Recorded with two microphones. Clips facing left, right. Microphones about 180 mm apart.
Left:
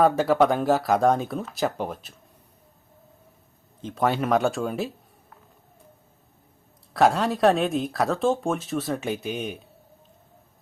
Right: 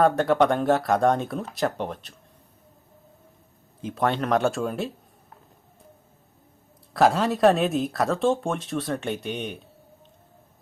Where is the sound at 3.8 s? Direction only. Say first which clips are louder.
Right 1 dB; 10° right (ahead or behind).